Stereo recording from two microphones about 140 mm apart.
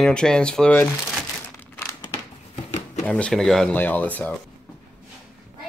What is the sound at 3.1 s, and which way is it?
Speech, 10° left (ahead or behind).